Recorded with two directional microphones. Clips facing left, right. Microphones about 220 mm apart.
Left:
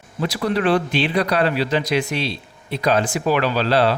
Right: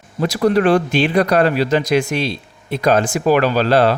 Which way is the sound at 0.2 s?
45° right (ahead or behind).